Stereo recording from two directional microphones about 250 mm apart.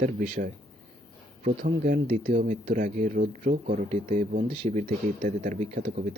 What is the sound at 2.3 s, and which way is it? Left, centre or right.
Speech, right.